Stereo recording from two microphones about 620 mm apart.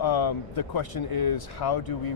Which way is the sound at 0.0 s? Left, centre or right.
Left.